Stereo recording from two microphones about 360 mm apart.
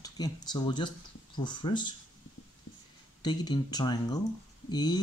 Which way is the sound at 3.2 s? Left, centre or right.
Centre.